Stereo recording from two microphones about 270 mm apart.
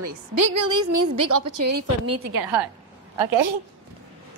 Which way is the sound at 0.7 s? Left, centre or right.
Right.